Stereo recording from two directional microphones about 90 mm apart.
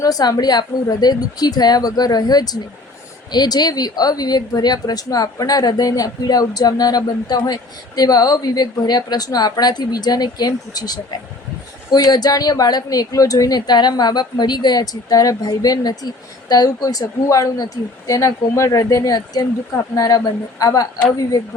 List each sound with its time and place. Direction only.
0.0 s speech: 45° left (ahead or behind)